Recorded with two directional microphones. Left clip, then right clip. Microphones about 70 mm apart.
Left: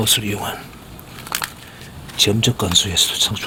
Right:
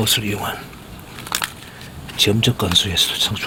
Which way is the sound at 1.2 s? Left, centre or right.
Centre.